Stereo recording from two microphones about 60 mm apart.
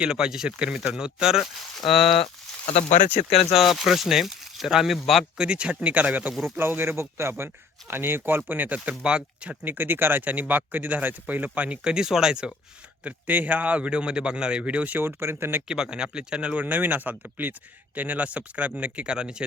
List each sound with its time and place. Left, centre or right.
0.0 s speech: centre
5.4 s speech: centre
6.6 s a man's voice: right; by 9.6 s centre
9.6 s speech: right; by 12.5 s centre
13.1 s speech: right
14.9 s a man's voice: right
15.6 s speech: centre